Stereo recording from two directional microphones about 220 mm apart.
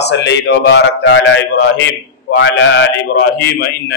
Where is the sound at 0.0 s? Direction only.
50° left (ahead or behind).